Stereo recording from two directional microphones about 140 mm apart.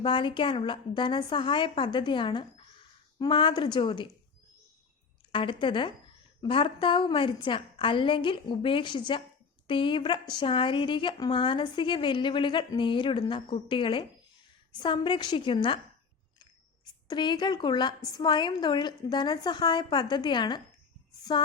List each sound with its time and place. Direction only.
0.0 s a woman's voice: 35° left (ahead or behind)
5.3 s a woman's voice: 35° left (ahead or behind)
17.1 s a woman's voice: 30° left (ahead or behind)